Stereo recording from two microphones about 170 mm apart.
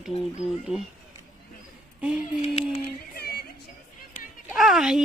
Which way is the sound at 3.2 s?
65° left (ahead or behind).